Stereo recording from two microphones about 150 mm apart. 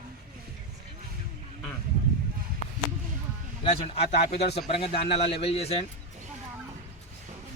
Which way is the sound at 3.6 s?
40° left (ahead or behind).